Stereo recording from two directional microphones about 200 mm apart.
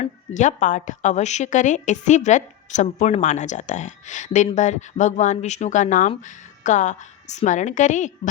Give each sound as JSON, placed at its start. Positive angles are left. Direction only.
{"t": 0.0, "sound": "a woman's voice", "side_deg": 40}